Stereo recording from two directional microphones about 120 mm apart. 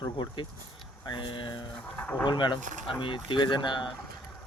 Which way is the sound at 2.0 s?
15° left (ahead or behind).